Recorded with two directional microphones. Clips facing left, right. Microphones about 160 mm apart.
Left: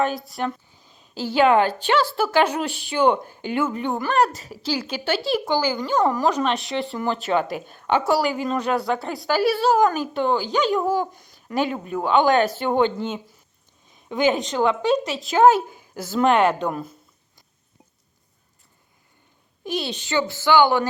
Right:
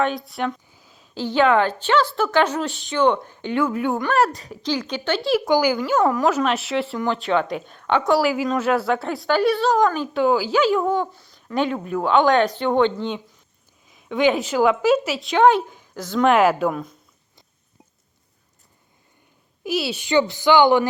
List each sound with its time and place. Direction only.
0.0 s a woman's voice: centre (ahead or behind)
5.5 s a woman's voice: 15° right (ahead or behind); by 9.9 s 10° left (ahead or behind)
10.0 s speech: 5° right (ahead or behind)
19.6 s a woman's voice: 5° right (ahead or behind)